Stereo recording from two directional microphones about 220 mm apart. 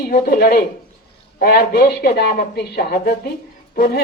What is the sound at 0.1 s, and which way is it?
Speech, 40° left (ahead or behind).